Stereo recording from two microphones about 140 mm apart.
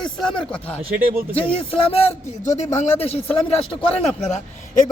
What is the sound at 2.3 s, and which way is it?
A man's voice, 55° left (ahead or behind).